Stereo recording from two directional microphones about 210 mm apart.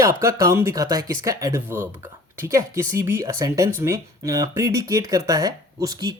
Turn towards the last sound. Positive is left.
turn(degrees=-20)  # may be behind; listen again after turning